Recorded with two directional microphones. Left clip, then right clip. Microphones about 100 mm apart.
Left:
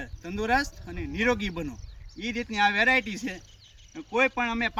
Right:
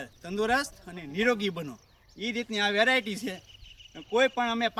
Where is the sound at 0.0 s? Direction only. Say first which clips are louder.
Right 2 dB; 40° right (ahead or behind).